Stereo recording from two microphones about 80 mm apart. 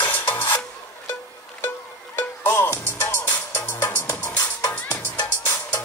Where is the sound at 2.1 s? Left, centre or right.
Left.